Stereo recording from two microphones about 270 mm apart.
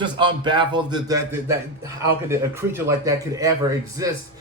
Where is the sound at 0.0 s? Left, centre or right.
Centre.